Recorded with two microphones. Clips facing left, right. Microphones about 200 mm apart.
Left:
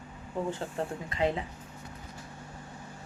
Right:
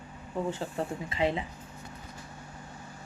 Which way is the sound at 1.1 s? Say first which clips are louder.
Even; centre (ahead or behind).